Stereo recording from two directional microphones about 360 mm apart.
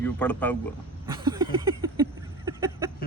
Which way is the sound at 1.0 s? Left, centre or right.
Centre.